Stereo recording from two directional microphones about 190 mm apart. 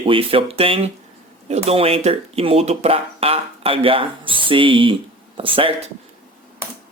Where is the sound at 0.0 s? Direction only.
30° right (ahead or behind).